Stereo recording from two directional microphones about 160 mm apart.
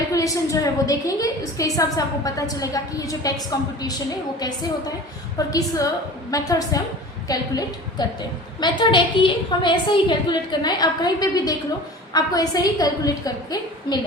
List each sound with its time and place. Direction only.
0.1 s a woman's voice: 20° left (ahead or behind)
5.5 s a woman's voice: 20° left (ahead or behind)